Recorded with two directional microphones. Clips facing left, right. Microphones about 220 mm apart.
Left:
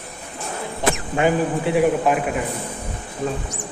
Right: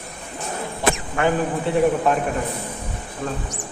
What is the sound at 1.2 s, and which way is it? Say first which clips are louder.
Speech: left 2 dB; 20° left (ahead or behind).